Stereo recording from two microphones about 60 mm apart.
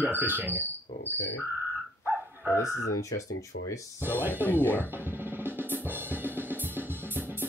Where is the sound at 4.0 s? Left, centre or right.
Right.